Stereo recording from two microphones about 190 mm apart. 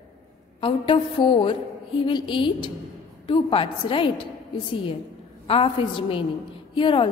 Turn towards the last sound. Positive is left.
turn(degrees=25)  # may be behind; listen again after turning